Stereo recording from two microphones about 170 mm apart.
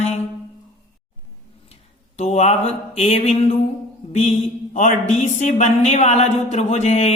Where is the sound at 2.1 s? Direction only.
40° left (ahead or behind).